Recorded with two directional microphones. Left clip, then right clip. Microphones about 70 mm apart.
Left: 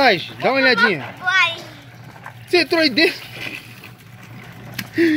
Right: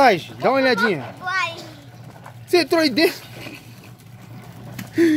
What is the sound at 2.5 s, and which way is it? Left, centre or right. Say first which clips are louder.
Speech: left 1 dB; right.